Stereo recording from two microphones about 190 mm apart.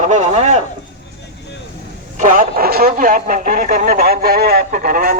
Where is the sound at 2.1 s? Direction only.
45° right (ahead or behind).